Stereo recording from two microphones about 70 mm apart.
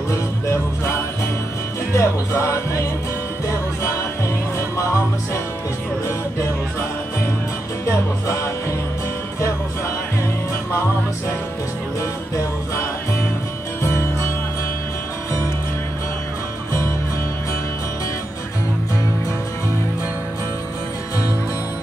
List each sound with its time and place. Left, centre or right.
0.1 s music: left
7.9 s music: left